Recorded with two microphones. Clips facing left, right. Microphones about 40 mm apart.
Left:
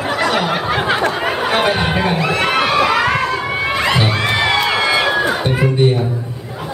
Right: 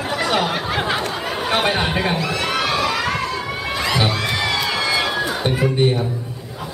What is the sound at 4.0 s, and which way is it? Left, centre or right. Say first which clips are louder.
Music: left 4 dB; left.